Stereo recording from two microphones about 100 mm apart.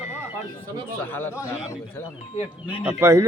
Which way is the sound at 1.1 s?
20° left (ahead or behind).